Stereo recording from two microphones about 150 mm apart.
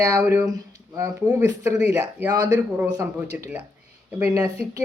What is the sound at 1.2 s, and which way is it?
Speech, 10° left (ahead or behind).